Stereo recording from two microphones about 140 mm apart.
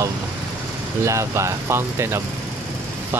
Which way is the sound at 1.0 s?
20° right (ahead or behind).